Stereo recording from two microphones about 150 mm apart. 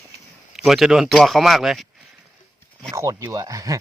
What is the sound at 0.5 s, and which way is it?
Speech, centre (ahead or behind).